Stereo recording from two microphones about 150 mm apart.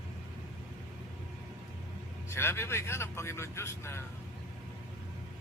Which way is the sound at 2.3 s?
15° left (ahead or behind).